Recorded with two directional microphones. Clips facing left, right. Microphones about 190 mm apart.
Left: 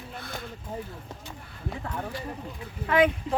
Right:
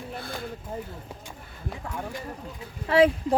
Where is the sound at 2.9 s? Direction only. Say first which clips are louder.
Right 3 dB; 30° right (ahead or behind).